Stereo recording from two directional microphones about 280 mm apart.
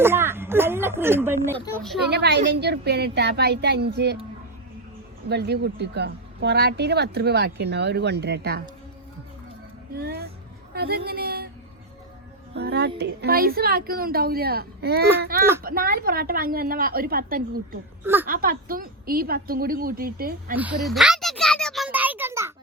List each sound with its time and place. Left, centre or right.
0.0 s speech: centre
2.0 s speech: right
5.3 s speech: right
9.9 s speech: right
12.5 s speech: right
18.0 s speech: centre
18.3 s speech: right
20.6 s a child's voice: centre